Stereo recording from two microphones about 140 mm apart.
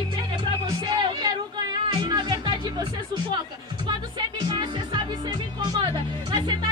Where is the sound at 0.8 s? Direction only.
30° right (ahead or behind).